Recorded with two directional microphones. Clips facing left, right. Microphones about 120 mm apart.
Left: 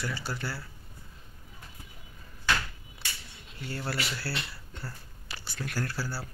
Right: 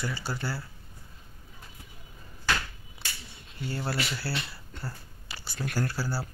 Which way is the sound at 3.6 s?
5° right (ahead or behind).